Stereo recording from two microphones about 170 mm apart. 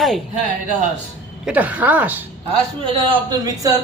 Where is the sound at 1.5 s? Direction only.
10° right (ahead or behind).